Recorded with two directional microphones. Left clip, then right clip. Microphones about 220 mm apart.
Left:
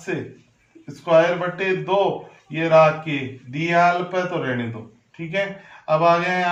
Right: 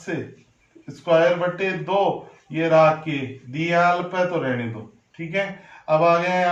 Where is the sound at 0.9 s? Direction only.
10° right (ahead or behind).